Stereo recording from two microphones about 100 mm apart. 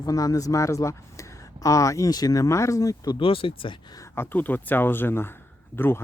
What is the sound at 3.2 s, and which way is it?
Speech, 60° left (ahead or behind).